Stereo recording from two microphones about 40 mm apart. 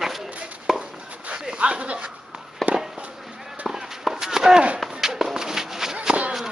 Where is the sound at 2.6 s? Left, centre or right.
Centre.